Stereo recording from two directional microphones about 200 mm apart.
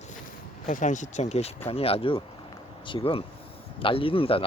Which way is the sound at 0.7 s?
40° left (ahead or behind).